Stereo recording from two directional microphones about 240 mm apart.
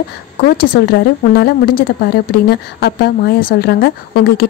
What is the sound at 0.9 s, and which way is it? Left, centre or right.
A woman's voice, left.